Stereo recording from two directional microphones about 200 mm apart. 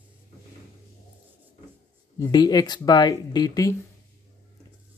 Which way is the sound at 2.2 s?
20° left (ahead or behind).